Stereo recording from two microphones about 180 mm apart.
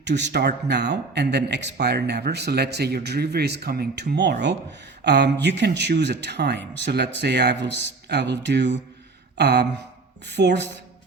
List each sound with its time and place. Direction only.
0.0 s a man's voice: 75° right (ahead or behind)